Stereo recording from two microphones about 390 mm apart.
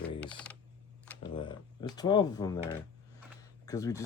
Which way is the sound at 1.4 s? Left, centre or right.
Centre.